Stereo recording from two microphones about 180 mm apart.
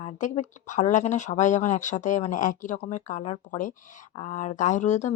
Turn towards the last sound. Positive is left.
turn(degrees=40)  # may be behind; listen again after turning